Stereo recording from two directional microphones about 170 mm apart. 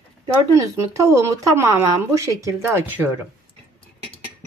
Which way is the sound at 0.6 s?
15° right (ahead or behind).